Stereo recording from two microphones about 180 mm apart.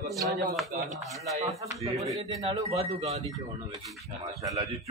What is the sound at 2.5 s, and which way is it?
Speech, 35° right (ahead or behind).